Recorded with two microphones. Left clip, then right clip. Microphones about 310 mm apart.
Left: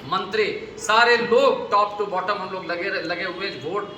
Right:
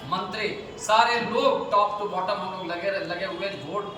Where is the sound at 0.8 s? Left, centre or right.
Centre.